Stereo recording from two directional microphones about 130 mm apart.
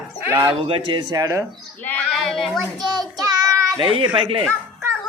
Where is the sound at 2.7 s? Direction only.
30° right (ahead or behind).